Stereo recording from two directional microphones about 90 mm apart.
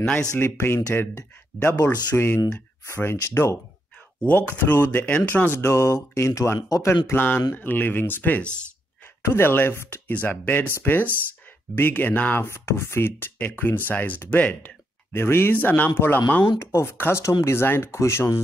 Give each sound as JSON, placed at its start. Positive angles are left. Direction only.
{"t": 0.0, "sound": "speech", "side_deg": 10}
{"t": 0.4, "sound": "speech", "side_deg": 25}
{"t": 9.2, "sound": "speech", "side_deg": 25}